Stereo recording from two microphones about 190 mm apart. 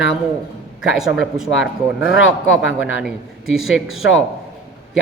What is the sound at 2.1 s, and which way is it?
Speech, 80° left.